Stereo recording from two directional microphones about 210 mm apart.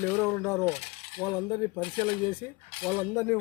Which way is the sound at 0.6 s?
25° left (ahead or behind).